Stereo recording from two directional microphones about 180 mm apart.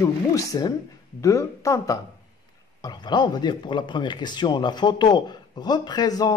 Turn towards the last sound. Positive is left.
turn(degrees=20)  # may be behind; listen again after turning